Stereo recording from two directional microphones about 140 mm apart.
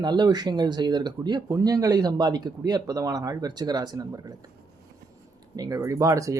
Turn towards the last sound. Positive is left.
turn(degrees=-25)  # may be behind; listen again after turning